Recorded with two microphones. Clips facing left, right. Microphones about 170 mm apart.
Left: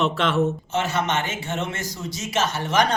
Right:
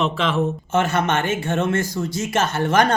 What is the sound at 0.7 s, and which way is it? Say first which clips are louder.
Speech: right 6 dB; 55° right (ahead or behind).